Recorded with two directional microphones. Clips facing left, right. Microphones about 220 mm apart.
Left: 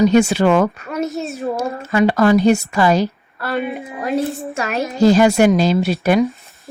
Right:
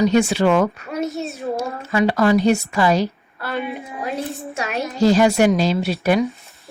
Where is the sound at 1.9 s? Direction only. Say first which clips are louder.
Left 3 dB; 50° left (ahead or behind).